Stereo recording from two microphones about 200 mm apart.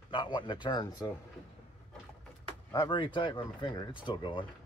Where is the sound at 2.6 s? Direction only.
20° left (ahead or behind).